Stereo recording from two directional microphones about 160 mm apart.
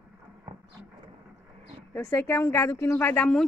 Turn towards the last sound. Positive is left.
turn(degrees=10)  # may be behind; listen again after turning